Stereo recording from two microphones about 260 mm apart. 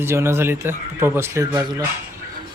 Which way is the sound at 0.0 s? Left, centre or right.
Centre.